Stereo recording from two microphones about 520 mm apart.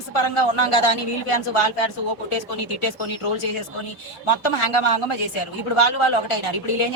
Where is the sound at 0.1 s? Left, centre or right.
Left.